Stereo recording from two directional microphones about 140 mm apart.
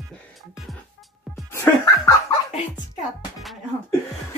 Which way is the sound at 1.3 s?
20° left (ahead or behind).